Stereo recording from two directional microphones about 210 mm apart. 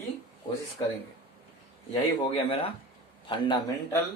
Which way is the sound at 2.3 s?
25° left (ahead or behind).